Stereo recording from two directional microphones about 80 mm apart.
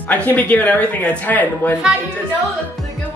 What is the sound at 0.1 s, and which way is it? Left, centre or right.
Speech, left.